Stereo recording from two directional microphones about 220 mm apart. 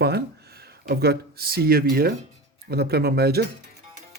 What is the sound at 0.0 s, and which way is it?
Speech, 45° right (ahead or behind).